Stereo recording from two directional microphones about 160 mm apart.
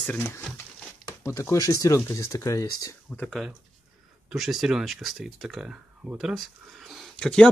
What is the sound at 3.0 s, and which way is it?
Speech, 5° left (ahead or behind).